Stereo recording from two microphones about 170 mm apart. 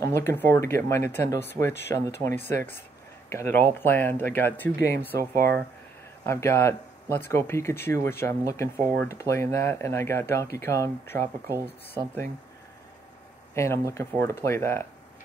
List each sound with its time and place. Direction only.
0.0 s speech: 15° left (ahead or behind)
5.3 s speech: 65° right (ahead or behind)
6.2 s speech: 15° left (ahead or behind)
13.6 s speech: 15° left (ahead or behind)